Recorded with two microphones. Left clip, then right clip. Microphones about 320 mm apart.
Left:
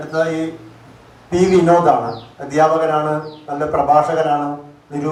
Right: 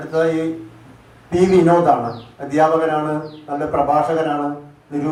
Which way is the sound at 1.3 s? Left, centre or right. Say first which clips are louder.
Left 1 dB; left.